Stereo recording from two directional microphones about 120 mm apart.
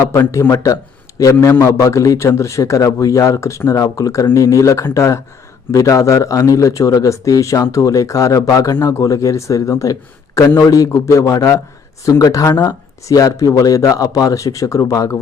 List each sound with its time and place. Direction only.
0.1 s a man's voice: 25° left (ahead or behind)